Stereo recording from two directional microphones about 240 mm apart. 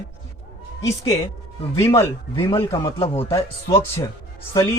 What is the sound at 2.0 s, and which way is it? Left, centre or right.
Speech, centre.